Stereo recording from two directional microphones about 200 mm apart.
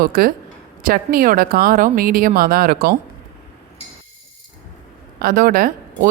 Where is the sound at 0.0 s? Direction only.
45° right (ahead or behind).